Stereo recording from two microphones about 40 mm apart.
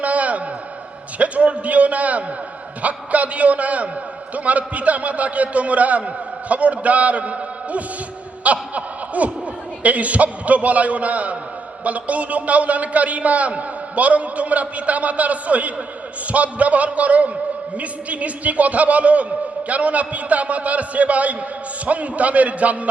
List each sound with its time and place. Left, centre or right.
0.0 s a sound: right
1.2 s a man's voice: right
8.4 s snicker: right
9.8 s a man's voice: right